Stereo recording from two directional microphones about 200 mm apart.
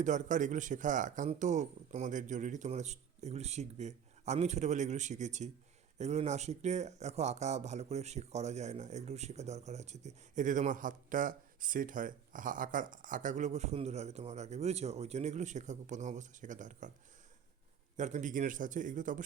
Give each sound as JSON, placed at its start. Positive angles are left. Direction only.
{"t": 0.0, "sound": "speech", "side_deg": -40}
{"t": 17.9, "sound": "speech", "side_deg": -40}